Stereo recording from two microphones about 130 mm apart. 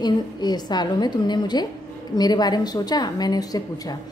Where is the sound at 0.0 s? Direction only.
35° left (ahead or behind).